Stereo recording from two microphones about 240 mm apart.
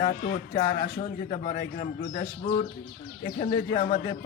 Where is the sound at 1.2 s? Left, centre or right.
Left.